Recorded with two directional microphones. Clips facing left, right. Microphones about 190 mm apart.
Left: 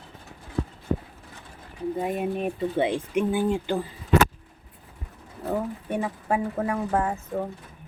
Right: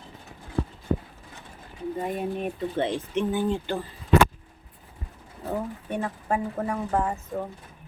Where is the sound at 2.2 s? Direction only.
5° left (ahead or behind).